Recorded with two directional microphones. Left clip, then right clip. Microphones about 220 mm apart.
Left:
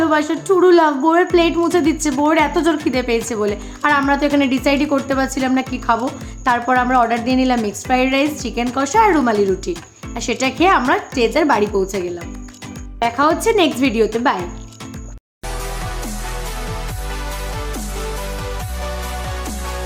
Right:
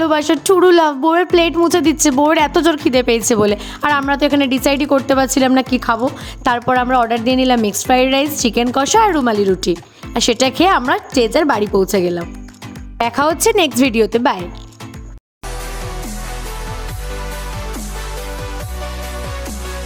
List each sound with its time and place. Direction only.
0.0 s a woman's voice: 45° right (ahead or behind)
13.1 s speech: 50° right (ahead or behind)